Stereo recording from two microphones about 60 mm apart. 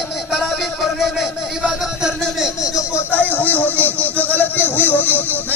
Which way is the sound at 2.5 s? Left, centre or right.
Left.